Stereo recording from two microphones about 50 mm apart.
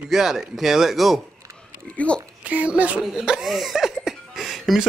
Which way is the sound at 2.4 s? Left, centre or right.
Right.